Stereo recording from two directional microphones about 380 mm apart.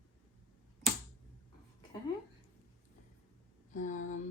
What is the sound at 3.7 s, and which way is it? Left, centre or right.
Speech, centre.